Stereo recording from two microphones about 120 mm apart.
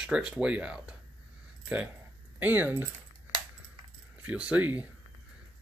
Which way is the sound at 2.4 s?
15° right (ahead or behind).